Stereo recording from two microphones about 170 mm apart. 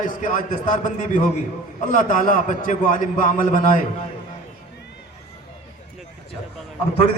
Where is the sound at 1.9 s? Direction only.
50° left (ahead or behind).